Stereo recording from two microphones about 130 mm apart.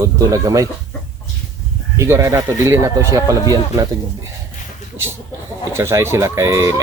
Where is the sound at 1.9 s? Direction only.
20° right (ahead or behind).